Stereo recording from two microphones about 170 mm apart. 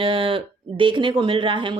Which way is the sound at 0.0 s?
30° right (ahead or behind).